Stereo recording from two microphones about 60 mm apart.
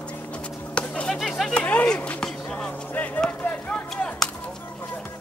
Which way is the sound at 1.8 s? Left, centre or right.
Centre.